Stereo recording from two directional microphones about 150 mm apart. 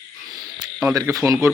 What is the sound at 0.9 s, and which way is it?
Speech, 20° right (ahead or behind).